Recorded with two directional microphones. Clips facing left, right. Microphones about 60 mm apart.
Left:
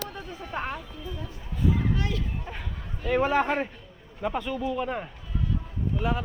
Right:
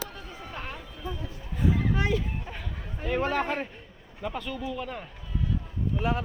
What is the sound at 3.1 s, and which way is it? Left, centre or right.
A man's voice, centre.